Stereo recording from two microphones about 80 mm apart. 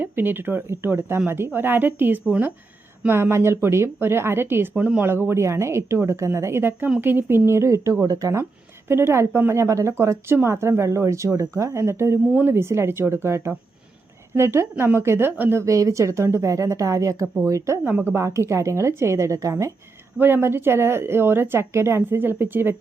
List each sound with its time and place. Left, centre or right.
0.0 s speech: right
3.1 s speech: right
4.7 s speech: centre; by 7.9 s right
8.0 s speech: right
12.3 s speech: right
12.5 s speech: right
17.8 s speech: right
20.1 s speech: right